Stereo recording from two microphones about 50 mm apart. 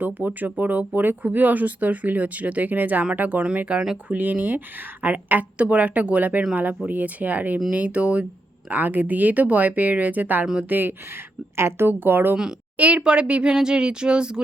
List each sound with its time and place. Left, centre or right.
0.0 s speech: right
8.7 s speech: right
11.5 s a woman's voice: right
11.9 s speech: right
12.7 s speech: right